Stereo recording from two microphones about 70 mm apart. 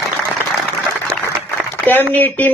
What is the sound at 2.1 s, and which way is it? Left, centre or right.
Speech, left.